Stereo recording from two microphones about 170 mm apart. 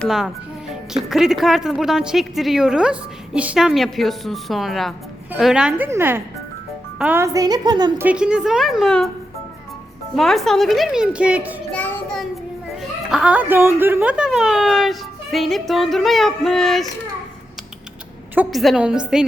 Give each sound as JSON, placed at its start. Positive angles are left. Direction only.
{"t": 0.0, "sound": "a woman's voice", "side_deg": 0}
{"t": 8.0, "sound": "speech", "side_deg": -5}
{"t": 10.2, "sound": "speech", "side_deg": 0}
{"t": 11.7, "sound": "child singing", "side_deg": 10}
{"t": 12.7, "sound": "speech", "side_deg": -5}
{"t": 18.3, "sound": "speech", "side_deg": 0}